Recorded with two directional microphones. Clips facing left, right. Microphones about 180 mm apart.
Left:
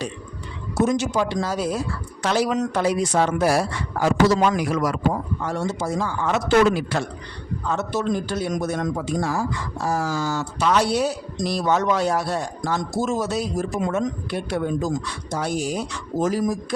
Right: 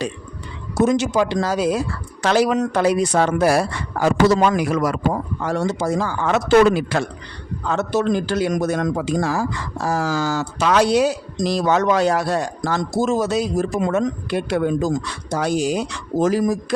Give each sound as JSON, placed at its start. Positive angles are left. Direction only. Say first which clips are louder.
{"t": 0.9, "sound": "a man's voice", "louder": "right 4 dB", "side_deg": -90}
{"t": 2.2, "sound": "a man's voice", "louder": "right 4 dB", "side_deg": -70}
{"t": 5.4, "sound": "speech", "louder": "right 4 dB", "side_deg": -90}
{"t": 7.7, "sound": "a man's voice", "louder": "right 4 dB", "side_deg": -80}